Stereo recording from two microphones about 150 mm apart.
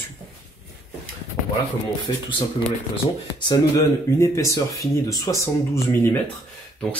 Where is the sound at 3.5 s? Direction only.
20° left (ahead or behind).